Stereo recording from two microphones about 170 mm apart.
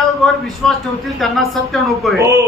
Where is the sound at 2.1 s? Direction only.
20° right (ahead or behind).